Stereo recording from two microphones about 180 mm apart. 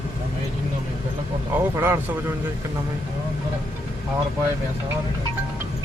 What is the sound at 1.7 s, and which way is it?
Speech, 15° right (ahead or behind).